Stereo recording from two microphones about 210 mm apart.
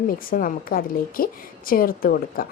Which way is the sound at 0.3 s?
40° left (ahead or behind).